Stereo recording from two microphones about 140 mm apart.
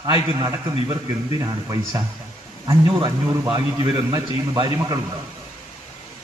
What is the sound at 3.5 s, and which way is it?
A man's voice, 25° right (ahead or behind).